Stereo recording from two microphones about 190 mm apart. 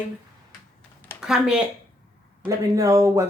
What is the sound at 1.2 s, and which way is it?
Speech, 5° right (ahead or behind).